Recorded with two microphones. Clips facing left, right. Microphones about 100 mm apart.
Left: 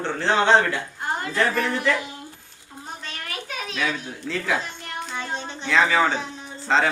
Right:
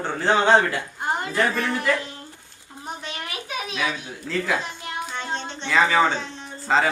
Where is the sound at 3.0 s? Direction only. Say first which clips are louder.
Right 1 dB; 15° right (ahead or behind).